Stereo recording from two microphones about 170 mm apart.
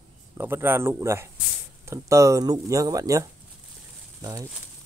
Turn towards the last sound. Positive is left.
turn(degrees=-20)  # may be behind; listen again after turning